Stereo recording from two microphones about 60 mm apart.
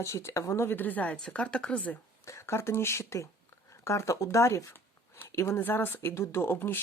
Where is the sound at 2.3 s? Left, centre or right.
Left.